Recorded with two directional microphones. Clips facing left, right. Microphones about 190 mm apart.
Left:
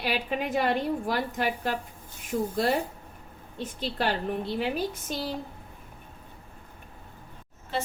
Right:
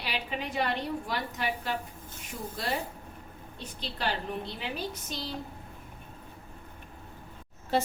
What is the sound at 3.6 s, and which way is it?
Speech, 50° left (ahead or behind).